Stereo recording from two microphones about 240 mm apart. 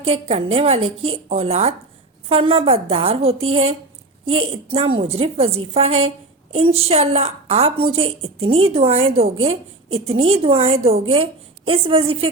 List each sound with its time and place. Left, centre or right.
0.0 s a woman's voice: right